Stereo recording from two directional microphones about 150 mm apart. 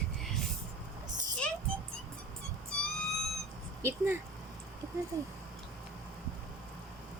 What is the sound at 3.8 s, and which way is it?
Speech, 15° right (ahead or behind).